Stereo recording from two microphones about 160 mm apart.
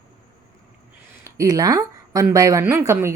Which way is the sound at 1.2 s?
20° right (ahead or behind).